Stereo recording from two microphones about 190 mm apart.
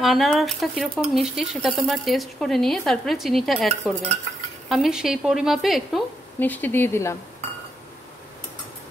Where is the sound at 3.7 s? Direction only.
35° right (ahead or behind).